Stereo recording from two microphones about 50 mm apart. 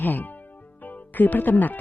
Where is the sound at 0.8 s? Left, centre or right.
Left.